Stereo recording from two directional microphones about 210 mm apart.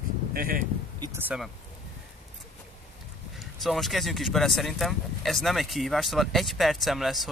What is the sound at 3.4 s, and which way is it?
Speech, centre (ahead or behind).